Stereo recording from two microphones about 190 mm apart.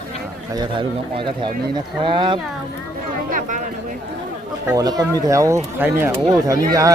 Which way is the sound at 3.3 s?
45° right (ahead or behind).